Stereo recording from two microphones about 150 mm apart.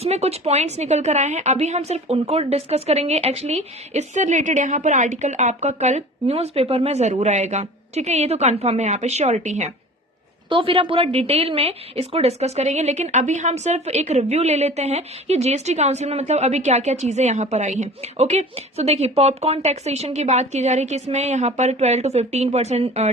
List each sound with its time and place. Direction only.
0.0 s a woman's voice: 45° right (ahead or behind)
10.5 s a woman's voice: 35° right (ahead or behind)